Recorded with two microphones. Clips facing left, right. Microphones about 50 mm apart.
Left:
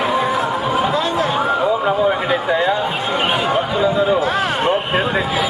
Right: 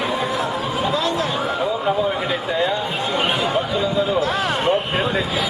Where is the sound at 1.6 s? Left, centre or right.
Centre.